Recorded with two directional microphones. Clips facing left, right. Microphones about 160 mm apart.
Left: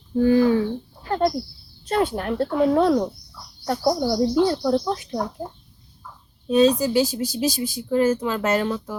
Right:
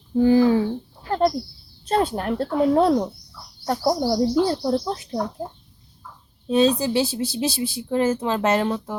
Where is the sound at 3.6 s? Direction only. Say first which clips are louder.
Even; 35° right (ahead or behind).